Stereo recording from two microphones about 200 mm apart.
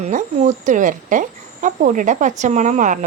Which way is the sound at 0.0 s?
35° right (ahead or behind).